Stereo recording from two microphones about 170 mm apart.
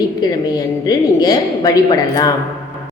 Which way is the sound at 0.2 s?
20° left (ahead or behind).